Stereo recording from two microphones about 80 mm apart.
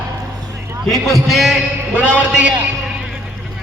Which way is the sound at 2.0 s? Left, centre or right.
Centre.